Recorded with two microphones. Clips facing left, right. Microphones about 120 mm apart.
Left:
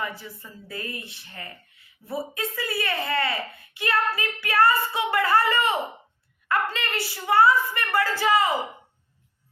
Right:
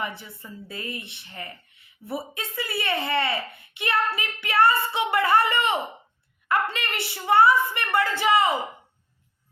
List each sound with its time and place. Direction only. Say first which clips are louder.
0.0 s a woman's voice: even; 25° right (ahead or behind)